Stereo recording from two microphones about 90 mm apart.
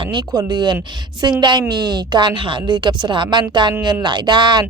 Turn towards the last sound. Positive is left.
turn(degrees=-55)  # may be behind; listen again after turning